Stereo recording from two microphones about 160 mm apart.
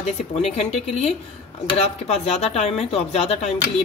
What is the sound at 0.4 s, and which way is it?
Speech, 40° left (ahead or behind).